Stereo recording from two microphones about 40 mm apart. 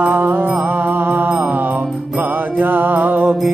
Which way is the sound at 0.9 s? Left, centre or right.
Right.